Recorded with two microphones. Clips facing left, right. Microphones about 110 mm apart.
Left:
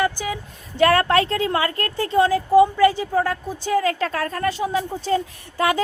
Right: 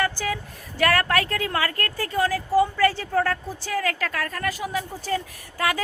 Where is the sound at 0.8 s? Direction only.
25° left (ahead or behind).